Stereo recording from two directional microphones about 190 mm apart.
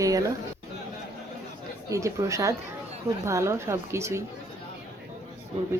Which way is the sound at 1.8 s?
15° right (ahead or behind).